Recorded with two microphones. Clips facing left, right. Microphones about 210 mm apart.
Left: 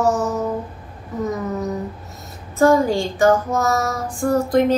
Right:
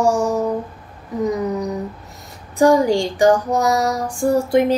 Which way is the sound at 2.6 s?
15° right (ahead or behind).